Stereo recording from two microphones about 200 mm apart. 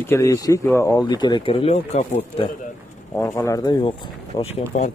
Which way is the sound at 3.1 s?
15° left (ahead or behind).